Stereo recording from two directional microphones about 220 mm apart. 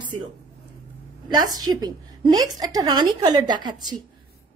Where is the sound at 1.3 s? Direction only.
20° right (ahead or behind).